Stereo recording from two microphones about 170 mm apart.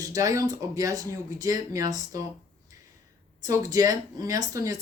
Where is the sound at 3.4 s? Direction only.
20° right (ahead or behind).